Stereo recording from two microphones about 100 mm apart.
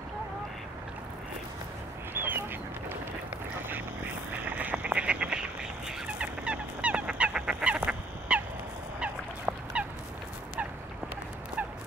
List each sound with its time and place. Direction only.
2.1 s duck: 20° right (ahead or behind)
3.6 s frog: 15° right (ahead or behind)
9.0 s fowl: 10° right (ahead or behind)